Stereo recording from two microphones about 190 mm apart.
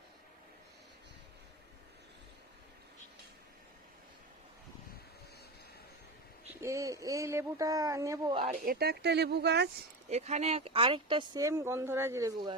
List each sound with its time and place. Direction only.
6.6 s speech: 15° right (ahead or behind)
8.5 s speech: 50° right (ahead or behind)
10.1 s speech: 35° right (ahead or behind); by 12.5 s 20° right (ahead or behind)